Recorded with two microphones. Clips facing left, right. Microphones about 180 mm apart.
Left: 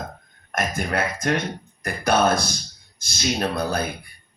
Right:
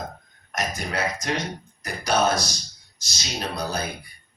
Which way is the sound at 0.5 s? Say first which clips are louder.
Left 4 dB; 55° left (ahead or behind).